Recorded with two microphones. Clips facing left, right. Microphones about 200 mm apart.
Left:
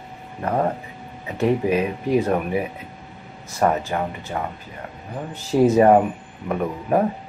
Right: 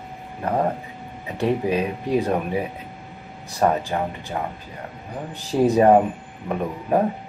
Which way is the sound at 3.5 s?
15° right (ahead or behind).